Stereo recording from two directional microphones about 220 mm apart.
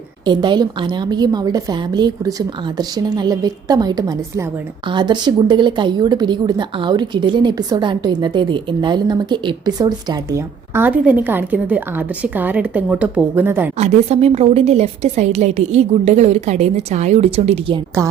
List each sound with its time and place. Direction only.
0.3 s a woman's voice: 20° right (ahead or behind)
13.7 s a woman's voice: 30° right (ahead or behind)